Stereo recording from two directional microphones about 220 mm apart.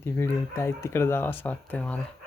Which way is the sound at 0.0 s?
10° left (ahead or behind).